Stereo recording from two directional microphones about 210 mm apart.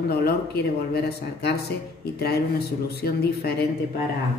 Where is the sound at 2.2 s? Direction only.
50° left (ahead or behind).